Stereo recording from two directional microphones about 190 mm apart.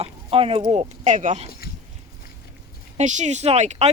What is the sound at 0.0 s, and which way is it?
Speech, 30° right (ahead or behind).